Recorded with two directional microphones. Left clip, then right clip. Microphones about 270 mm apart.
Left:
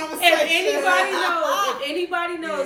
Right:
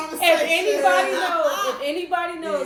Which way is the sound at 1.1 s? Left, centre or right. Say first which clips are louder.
Even; centre.